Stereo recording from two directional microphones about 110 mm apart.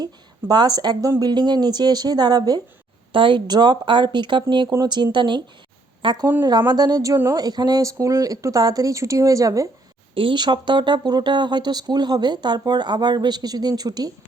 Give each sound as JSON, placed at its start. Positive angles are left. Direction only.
{"t": 0.0, "sound": "speech", "side_deg": -40}
{"t": 3.1, "sound": "a woman's voice", "side_deg": -50}
{"t": 10.2, "sound": "speech", "side_deg": -45}